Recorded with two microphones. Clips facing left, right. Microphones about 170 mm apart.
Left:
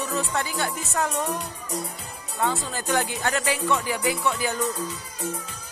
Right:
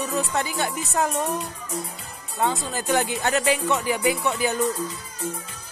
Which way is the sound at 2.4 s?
20° right (ahead or behind).